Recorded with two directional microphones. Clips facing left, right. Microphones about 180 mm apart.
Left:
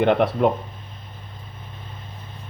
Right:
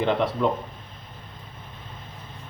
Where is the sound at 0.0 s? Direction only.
60° left (ahead or behind).